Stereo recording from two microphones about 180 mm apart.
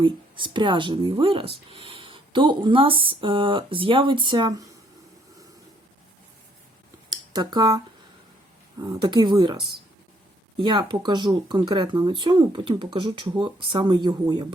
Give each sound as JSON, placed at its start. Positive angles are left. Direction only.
{"t": 0.0, "sound": "speech", "side_deg": -25}
{"t": 7.1, "sound": "a sound", "side_deg": -25}
{"t": 8.8, "sound": "speech", "side_deg": -25}
{"t": 10.6, "sound": "speech", "side_deg": -25}